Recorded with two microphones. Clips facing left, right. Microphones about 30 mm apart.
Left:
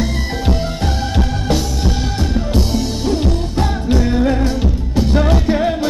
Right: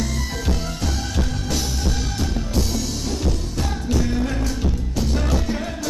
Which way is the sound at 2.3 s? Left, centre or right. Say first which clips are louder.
Left 8 dB; left.